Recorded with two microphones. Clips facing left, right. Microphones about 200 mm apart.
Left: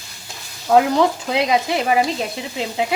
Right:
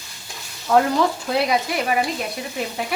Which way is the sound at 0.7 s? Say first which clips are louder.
Left 3 dB; 15° left (ahead or behind).